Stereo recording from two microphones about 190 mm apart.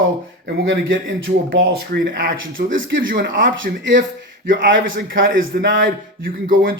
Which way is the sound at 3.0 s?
45° right (ahead or behind).